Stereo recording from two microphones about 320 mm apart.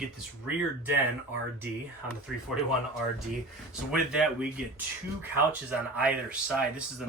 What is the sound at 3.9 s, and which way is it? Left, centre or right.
Speech, centre.